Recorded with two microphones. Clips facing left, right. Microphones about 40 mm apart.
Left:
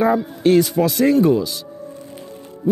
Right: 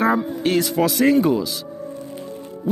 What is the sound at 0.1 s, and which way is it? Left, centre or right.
Speech, centre.